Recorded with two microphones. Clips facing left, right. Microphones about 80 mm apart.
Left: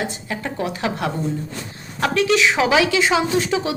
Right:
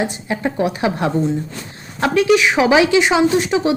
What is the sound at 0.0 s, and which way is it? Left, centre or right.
A woman's voice, right.